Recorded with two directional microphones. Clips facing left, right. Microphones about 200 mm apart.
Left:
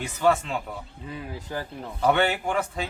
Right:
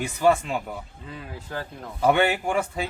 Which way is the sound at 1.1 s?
15° left (ahead or behind).